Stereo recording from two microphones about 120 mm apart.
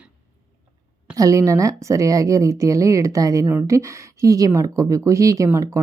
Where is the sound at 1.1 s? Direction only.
30° right (ahead or behind).